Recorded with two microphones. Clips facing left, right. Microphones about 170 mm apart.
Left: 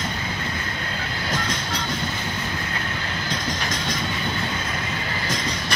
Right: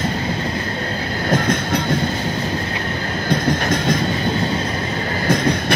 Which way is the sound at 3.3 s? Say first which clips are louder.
Right 12 dB; 55° right (ahead or behind).